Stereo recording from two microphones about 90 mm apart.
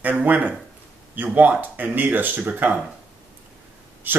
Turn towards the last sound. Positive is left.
turn(degrees=-20)  # may be behind; listen again after turning